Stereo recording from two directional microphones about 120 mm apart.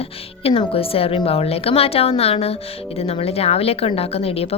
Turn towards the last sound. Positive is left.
turn(degrees=55)  # may be behind; listen again after turning